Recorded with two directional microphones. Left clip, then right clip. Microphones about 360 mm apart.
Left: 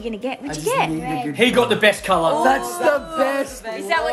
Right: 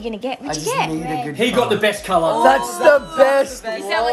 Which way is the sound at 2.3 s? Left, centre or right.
Right.